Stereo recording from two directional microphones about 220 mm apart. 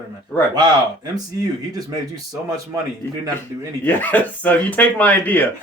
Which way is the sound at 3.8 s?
10° left (ahead or behind).